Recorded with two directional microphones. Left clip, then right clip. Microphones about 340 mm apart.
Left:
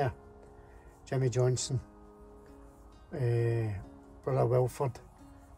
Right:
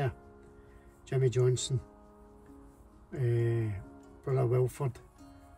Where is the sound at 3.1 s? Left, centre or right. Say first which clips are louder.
Left 1 dB; centre.